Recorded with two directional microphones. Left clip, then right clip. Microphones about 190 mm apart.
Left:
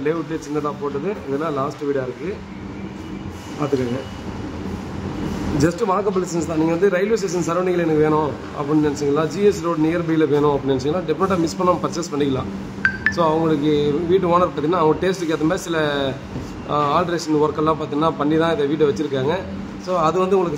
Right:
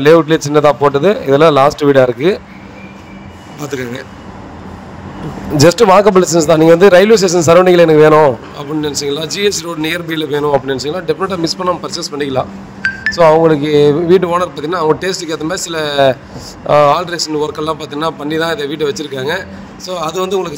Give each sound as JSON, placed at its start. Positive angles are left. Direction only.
{"t": 0.0, "sound": "speech", "side_deg": -45}
{"t": 5.6, "sound": "speech", "side_deg": -45}